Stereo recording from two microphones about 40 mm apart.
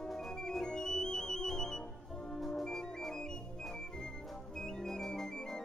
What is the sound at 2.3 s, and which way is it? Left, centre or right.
Music, centre.